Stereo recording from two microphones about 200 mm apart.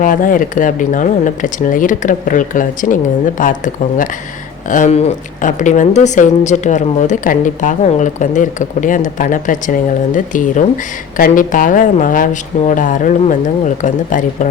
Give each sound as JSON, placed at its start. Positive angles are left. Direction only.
{"t": 0.0, "sound": "speech", "side_deg": 40}